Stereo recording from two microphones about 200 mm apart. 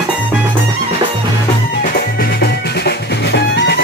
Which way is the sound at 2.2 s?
55° left (ahead or behind).